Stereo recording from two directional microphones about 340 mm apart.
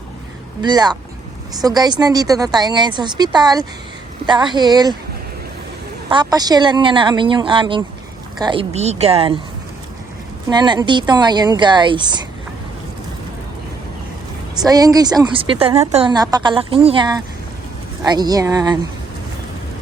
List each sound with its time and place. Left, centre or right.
0.6 s a woman's voice: centre
6.1 s a woman's voice: centre
10.5 s a woman's voice: centre
14.6 s a woman's voice: centre